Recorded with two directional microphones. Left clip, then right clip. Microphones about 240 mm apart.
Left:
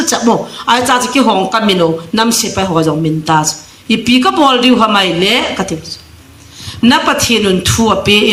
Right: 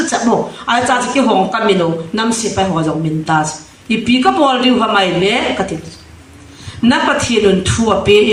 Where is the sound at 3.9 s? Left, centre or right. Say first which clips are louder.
Left 2 dB; left.